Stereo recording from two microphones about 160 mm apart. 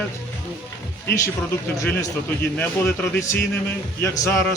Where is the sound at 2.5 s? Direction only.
10° left (ahead or behind).